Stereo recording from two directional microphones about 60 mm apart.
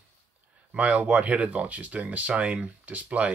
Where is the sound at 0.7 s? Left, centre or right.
Right.